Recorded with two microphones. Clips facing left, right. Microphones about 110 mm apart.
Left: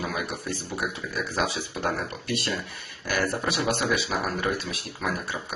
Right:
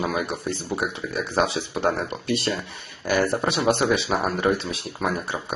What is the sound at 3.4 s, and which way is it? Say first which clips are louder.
Speech: right 5 dB; 25° right (ahead or behind).